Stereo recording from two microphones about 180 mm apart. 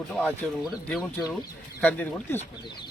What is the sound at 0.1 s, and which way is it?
Speech, 10° left (ahead or behind).